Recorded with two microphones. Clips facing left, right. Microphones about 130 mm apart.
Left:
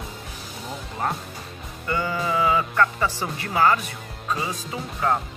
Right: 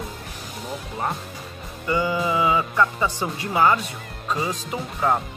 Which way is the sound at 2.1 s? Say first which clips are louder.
Left 2 dB; 5° right (ahead or behind).